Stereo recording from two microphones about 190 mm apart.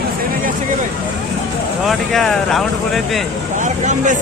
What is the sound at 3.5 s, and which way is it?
Vehicle, 40° right (ahead or behind).